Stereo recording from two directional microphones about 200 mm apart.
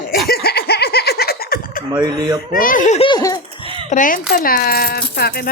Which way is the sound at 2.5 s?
45° left (ahead or behind).